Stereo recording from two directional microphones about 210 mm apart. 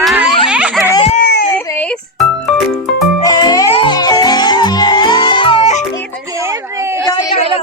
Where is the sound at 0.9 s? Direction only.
30° left (ahead or behind).